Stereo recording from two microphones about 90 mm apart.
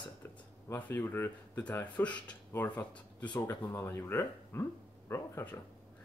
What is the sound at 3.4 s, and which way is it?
Speech, 25° left (ahead or behind).